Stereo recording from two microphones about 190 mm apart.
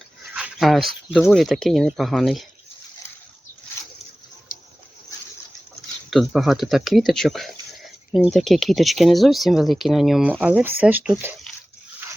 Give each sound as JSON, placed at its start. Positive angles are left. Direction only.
{"t": 0.3, "sound": "a sound", "side_deg": 0}
{"t": 1.3, "sound": "speech", "side_deg": 0}
{"t": 4.5, "sound": "dog", "side_deg": 45}
{"t": 6.1, "sound": "speech", "side_deg": 0}